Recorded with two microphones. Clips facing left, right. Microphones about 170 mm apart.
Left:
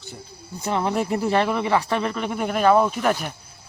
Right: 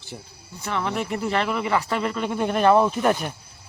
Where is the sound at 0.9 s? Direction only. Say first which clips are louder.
Left 4 dB; 35° left (ahead or behind); by 3.0 s centre (ahead or behind).